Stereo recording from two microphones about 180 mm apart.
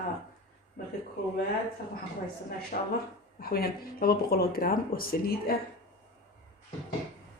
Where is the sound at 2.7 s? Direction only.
50° left (ahead or behind).